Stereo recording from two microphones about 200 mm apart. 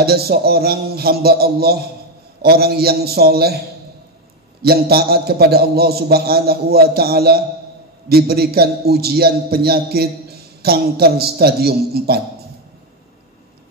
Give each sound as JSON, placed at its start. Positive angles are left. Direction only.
{"t": 0.0, "sound": "a man's voice", "side_deg": -50}